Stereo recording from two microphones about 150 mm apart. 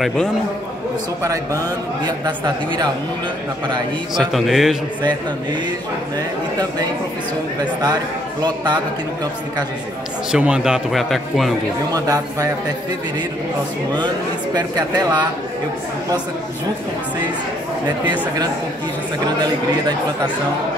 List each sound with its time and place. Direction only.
1.2 s speech: 20° right (ahead or behind)
4.2 s a man's voice: centre (ahead or behind)
7.6 s speech: 25° right (ahead or behind)
10.3 s a man's voice: 5° right (ahead or behind)
11.9 s speech: 25° right (ahead or behind)
13.9 s speech: 25° right (ahead or behind)